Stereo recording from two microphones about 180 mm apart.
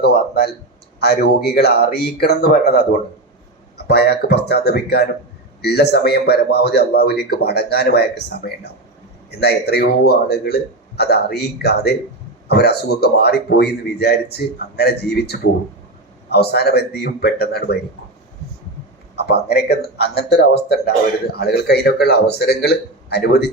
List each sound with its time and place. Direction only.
0.0 s a sound: 60° left (ahead or behind)
0.9 s speech: 65° left (ahead or behind)
19.1 s speech: 65° left (ahead or behind)